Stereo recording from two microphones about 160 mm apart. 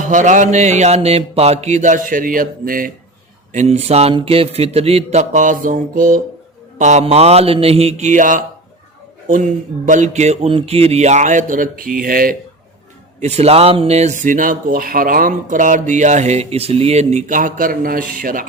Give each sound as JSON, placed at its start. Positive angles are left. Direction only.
{"t": 0.0, "sound": "speech", "side_deg": -55}
{"t": 3.5, "sound": "a man's voice", "side_deg": -45}
{"t": 6.7, "sound": "a man's voice", "side_deg": -50}
{"t": 13.1, "sound": "speech", "side_deg": -45}